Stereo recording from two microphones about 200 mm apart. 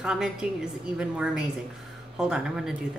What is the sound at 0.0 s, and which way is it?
Speech, 5° right (ahead or behind).